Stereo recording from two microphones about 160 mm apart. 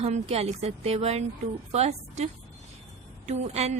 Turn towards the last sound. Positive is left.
turn(degrees=-40)  # may be behind; listen again after turning